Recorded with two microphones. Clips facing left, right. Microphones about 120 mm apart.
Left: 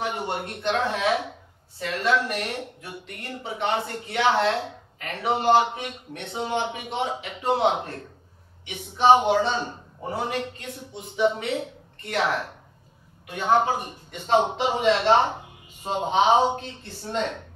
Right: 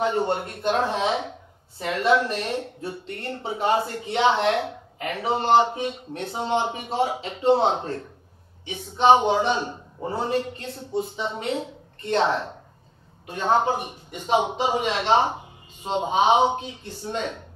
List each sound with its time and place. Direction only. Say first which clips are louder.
0.0 s speech: right 5 dB; 30° right (ahead or behind)
0.7 s speech: even; 20° right (ahead or behind)
6.7 s speech: right 4 dB; 35° right (ahead or behind)
9.4 s speech: right 2 dB; 15° right (ahead or behind)
10.0 s a woman's voice: right 3 dB; 30° right (ahead or behind)
13.5 s speech: even; 20° right (ahead or behind)